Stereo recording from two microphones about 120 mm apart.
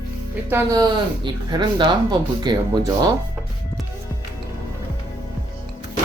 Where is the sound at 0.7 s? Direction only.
35° right (ahead or behind).